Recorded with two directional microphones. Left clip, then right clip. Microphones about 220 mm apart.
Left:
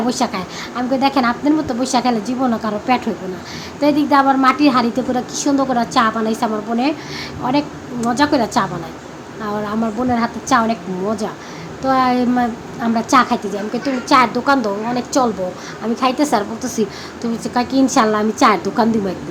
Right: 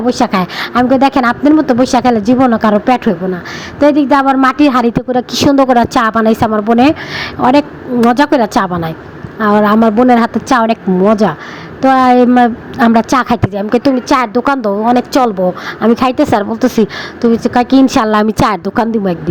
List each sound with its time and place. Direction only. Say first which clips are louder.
0.1 s a woman's voice: right 8 dB; 35° right (ahead or behind)